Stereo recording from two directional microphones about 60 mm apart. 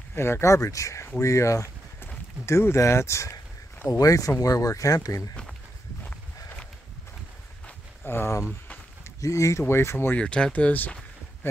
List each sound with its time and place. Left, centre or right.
0.1 s speech: left
3.9 s speech: left
8.0 s speech: left
9.2 s speech: left
10.1 s speech: centre